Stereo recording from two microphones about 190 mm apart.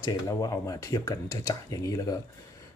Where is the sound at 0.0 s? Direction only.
20° left (ahead or behind).